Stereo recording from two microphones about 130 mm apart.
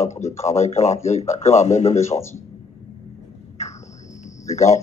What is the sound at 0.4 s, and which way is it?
A man's voice, 60° left (ahead or behind).